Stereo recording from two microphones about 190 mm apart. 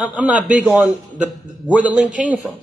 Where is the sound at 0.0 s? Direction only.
5° right (ahead or behind).